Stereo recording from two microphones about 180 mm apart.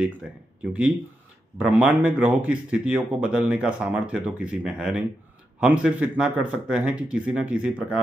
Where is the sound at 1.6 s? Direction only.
5° right (ahead or behind).